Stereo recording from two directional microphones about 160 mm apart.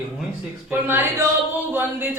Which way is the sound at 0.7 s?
15° right (ahead or behind).